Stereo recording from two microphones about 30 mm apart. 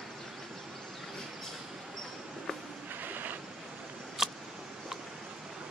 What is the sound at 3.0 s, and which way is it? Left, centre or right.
Vehicle, right.